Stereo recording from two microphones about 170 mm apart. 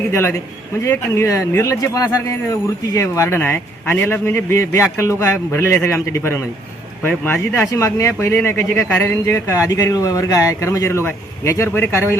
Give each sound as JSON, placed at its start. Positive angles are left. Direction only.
{"t": 0.1, "sound": "speech", "side_deg": 15}